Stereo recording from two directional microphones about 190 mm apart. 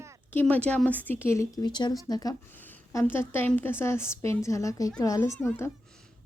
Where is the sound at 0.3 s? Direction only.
5° left (ahead or behind).